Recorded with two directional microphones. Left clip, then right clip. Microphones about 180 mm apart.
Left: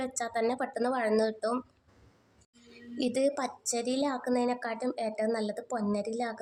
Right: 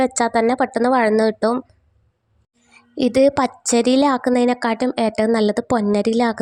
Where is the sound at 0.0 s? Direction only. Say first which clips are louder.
Right 14 dB; 50° right (ahead or behind).